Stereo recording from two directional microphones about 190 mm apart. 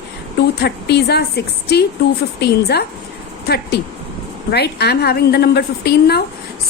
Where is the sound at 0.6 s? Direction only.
60° left (ahead or behind).